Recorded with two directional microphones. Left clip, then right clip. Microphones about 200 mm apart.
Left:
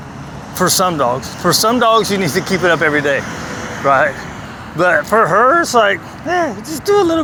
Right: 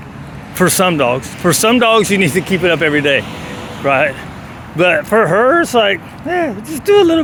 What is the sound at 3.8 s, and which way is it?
Speech, 45° right (ahead or behind).